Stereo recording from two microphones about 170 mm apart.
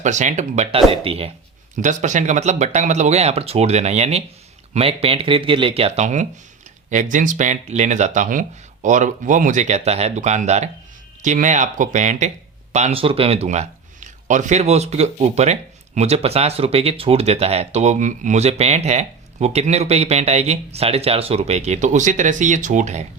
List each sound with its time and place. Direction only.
0.0 s speech: 45° right (ahead or behind)
1.7 s speech: 45° right (ahead or behind)